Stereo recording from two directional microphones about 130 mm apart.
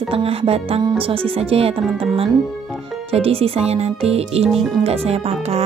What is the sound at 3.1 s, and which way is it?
Speech, 50° right (ahead or behind).